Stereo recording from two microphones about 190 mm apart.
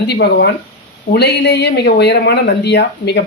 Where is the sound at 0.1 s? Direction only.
60° left (ahead or behind).